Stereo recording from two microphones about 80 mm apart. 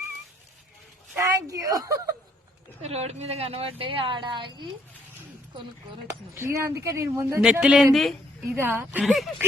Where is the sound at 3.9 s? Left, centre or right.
Right.